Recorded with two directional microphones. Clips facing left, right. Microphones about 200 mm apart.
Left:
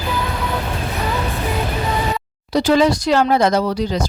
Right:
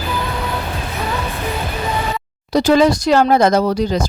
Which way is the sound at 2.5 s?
45° right (ahead or behind).